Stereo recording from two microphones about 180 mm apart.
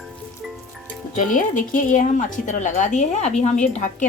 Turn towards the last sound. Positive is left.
turn(degrees=45)  # may be behind; listen again after turning